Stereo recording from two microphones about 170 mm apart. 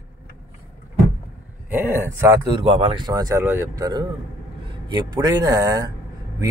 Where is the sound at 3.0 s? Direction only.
20° right (ahead or behind).